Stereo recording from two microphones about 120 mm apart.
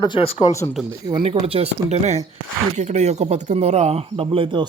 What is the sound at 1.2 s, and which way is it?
Speech, 50° right (ahead or behind).